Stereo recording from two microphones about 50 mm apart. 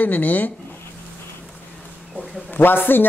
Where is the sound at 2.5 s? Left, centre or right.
Left.